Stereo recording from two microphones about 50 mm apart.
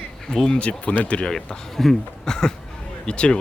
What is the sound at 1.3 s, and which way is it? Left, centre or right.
Speech, centre.